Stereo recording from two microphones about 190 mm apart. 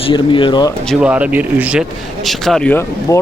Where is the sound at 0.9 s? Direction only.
5° right (ahead or behind).